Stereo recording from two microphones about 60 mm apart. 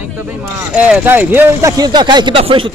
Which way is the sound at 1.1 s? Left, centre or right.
Right.